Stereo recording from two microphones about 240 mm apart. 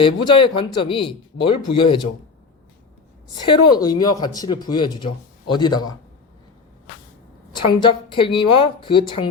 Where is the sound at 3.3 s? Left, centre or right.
Centre.